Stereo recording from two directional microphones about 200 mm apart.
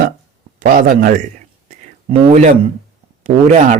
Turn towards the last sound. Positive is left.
turn(degrees=-35)  # may be behind; listen again after turning